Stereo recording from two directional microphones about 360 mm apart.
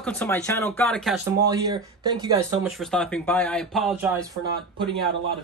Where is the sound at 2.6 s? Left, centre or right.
Centre.